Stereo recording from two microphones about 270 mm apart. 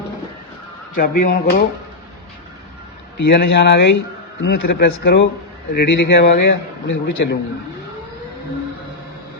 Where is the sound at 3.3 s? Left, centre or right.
Left.